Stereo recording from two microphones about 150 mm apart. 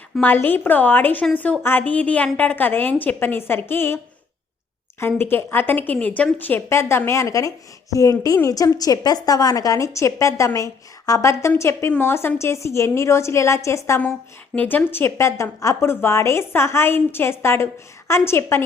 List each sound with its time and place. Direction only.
0.2 s a woman's voice: 10° left (ahead or behind)